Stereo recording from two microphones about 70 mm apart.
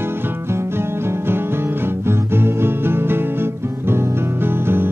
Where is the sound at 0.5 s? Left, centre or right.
Right.